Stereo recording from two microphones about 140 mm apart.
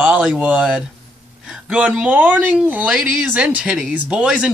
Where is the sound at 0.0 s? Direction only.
5° right (ahead or behind).